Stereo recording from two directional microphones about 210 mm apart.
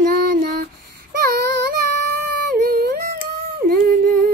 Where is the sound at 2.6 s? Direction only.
45° right (ahead or behind).